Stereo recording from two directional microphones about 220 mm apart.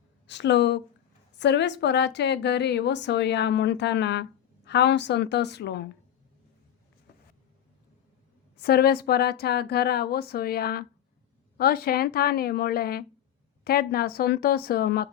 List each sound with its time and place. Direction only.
0.3 s a woman's voice: 50° left (ahead or behind)
8.5 s a woman's voice: 45° left (ahead or behind)